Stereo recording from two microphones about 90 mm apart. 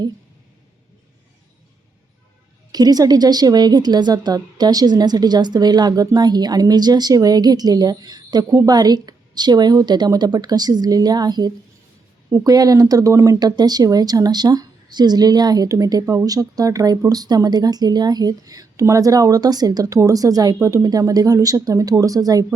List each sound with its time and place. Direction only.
2.7 s a woman's voice: 45° right (ahead or behind)
13.4 s a woman's voice: 50° right (ahead or behind)